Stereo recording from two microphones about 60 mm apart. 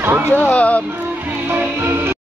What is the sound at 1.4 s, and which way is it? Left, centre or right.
Music, right.